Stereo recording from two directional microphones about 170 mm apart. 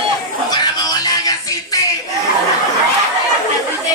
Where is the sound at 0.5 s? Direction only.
25° left (ahead or behind).